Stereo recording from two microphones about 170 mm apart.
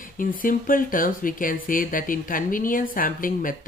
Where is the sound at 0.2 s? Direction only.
55° left (ahead or behind).